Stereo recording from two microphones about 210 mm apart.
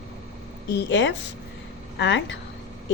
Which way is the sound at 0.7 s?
55° left (ahead or behind).